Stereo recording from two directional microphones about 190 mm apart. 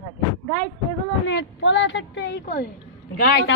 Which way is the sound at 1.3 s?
75° left (ahead or behind).